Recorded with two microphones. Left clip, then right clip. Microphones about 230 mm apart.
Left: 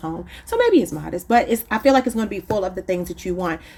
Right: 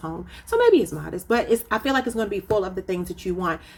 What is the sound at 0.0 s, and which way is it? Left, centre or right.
Speech, left.